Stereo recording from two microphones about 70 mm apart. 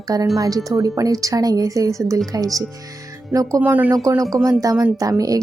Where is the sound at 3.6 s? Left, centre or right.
Right.